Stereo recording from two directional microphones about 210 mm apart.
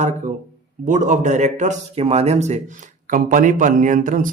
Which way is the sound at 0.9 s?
35° right (ahead or behind).